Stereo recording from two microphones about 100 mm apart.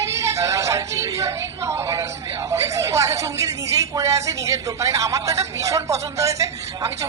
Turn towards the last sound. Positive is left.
turn(degrees=-30)  # may be behind; listen again after turning